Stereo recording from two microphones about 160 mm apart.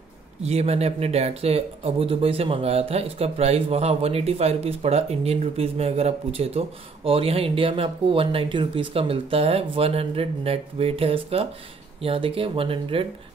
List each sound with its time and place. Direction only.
0.4 s speech: 40° right (ahead or behind)